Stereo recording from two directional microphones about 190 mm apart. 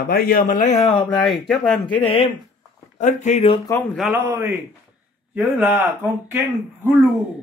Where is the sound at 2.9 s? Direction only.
40° left (ahead or behind).